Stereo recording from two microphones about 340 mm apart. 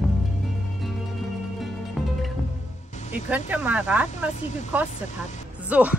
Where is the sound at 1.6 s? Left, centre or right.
Centre.